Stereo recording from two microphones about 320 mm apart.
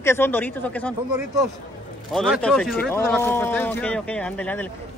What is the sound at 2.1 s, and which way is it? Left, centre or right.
Speech, centre.